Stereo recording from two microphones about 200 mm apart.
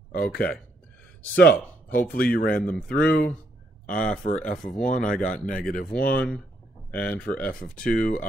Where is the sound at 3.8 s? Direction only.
40° left (ahead or behind).